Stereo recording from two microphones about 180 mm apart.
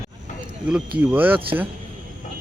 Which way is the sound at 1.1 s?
10° right (ahead or behind).